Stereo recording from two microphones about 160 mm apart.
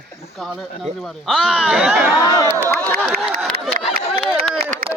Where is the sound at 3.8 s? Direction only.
50° right (ahead or behind).